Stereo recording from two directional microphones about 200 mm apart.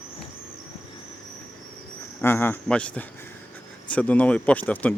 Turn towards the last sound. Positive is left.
turn(degrees=10)  # may be behind; listen again after turning